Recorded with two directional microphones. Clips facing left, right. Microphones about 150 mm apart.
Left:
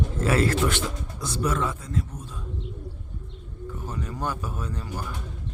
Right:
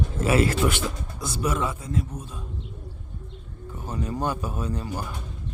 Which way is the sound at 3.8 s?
20° right (ahead or behind).